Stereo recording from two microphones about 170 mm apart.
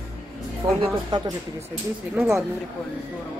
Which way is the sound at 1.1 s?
25° right (ahead or behind).